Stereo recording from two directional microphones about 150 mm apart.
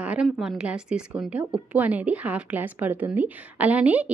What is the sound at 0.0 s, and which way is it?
A woman's voice, 10° right (ahead or behind).